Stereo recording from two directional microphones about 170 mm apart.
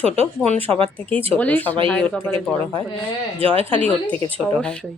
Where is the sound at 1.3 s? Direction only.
10° left (ahead or behind).